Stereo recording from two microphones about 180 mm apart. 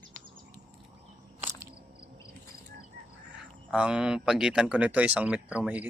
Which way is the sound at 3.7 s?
5° right (ahead or behind).